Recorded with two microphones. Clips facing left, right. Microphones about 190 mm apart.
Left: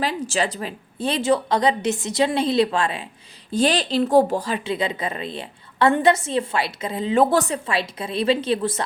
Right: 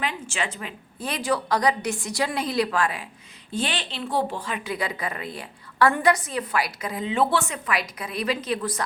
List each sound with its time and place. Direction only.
0.0 s a woman's voice: 35° left (ahead or behind)
3.5 s a woman's voice: 40° left (ahead or behind)
7.1 s a woman's voice: 40° left (ahead or behind)